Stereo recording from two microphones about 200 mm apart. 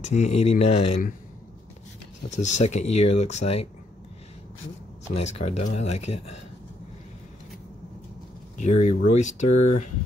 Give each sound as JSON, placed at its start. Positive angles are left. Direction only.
{"t": 0.0, "sound": "speech", "side_deg": 35}
{"t": 2.3, "sound": "speech", "side_deg": 35}
{"t": 5.1, "sound": "speech", "side_deg": 35}
{"t": 8.5, "sound": "speech", "side_deg": 35}